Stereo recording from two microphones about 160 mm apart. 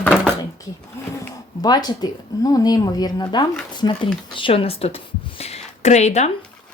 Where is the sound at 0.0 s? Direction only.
5° left (ahead or behind).